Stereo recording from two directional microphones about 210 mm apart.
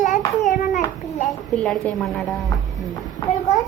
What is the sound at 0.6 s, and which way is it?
Speech, 35° left (ahead or behind).